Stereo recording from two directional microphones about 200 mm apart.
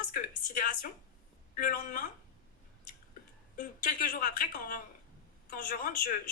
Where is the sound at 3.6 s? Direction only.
45° left (ahead or behind).